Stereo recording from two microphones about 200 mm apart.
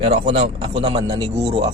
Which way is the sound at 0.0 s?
25° right (ahead or behind).